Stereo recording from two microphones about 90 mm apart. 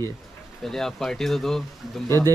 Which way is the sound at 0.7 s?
5° left (ahead or behind).